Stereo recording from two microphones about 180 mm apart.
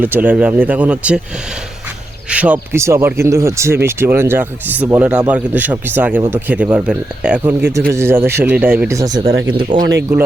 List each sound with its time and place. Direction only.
0.0 s speech: 10° right (ahead or behind)
2.3 s speech: 10° right (ahead or behind)